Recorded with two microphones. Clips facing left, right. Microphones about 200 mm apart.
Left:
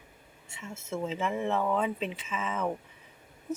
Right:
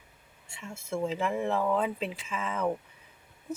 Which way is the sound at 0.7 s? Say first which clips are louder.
Right 1 dB; 30° right (ahead or behind).